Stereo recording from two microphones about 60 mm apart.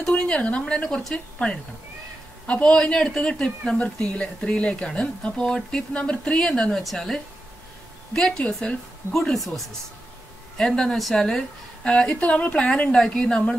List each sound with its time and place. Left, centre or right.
0.0 s a woman's voice: centre
10.6 s a woman's voice: centre
11.8 s speech: centre